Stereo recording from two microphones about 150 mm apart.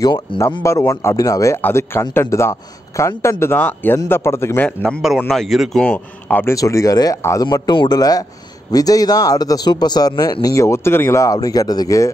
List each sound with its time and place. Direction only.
0.0 s speech: 30° left (ahead or behind)
0.6 s a man's voice: 20° left (ahead or behind)
5.3 s speech: centre (ahead or behind)
6.5 s a man's voice: 20° left (ahead or behind)